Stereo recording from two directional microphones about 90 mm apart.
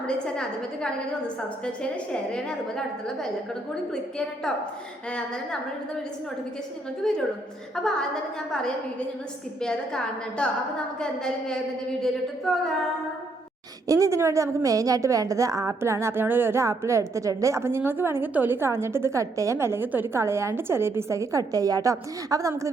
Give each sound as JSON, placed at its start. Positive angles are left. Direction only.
{"t": 0.0, "sound": "a woman's voice", "side_deg": 10}
{"t": 2.3, "sound": "a woman's voice", "side_deg": 5}
{"t": 7.0, "sound": "a woman's voice", "side_deg": 5}
{"t": 9.6, "sound": "a woman's voice", "side_deg": 10}
{"t": 13.8, "sound": "a woman's voice", "side_deg": -35}